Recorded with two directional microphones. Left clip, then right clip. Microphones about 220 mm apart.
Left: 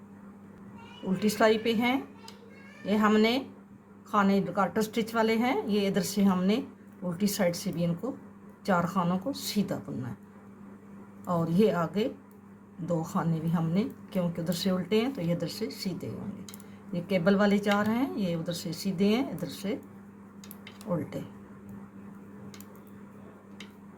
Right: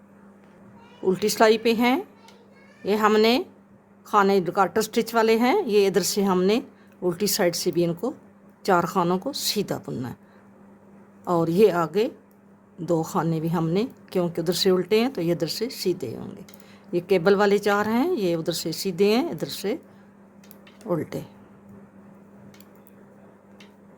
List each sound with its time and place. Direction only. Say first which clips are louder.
1.1 s a woman's voice: right 5 dB; 50° right (ahead or behind)
11.3 s a woman's voice: right 8 dB; 50° right (ahead or behind)
20.9 s a woman's voice: right 6 dB; 50° right (ahead or behind)